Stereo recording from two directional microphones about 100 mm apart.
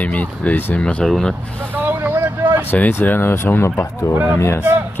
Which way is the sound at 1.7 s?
20° right (ahead or behind).